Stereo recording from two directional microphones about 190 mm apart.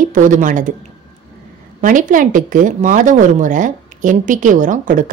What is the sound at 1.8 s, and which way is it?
Speech, 45° right (ahead or behind).